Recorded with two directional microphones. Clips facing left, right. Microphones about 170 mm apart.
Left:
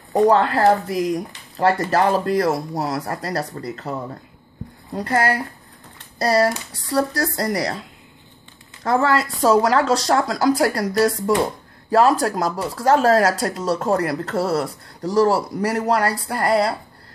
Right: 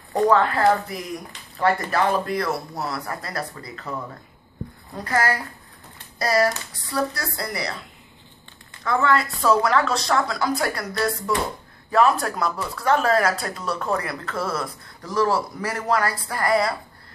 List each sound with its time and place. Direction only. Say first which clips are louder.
0.3 s speech: left 1 dB; 35° left (ahead or behind)
0.8 s speech: left 11 dB; 90° left
1.1 s a woman's voice: left 8 dB; 35° left (ahead or behind)
8.8 s a woman's voice: left 3 dB; 40° left (ahead or behind)